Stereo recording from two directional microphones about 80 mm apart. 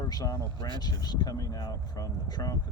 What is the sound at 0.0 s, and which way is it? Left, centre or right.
Speech, left.